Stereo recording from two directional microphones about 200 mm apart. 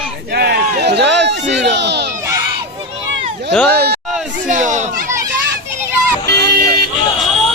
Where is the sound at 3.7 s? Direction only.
50° right (ahead or behind).